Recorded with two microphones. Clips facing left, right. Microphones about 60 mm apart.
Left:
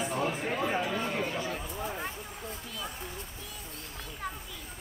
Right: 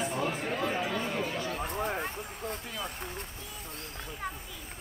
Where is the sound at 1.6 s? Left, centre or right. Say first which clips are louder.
Right 4 dB; right.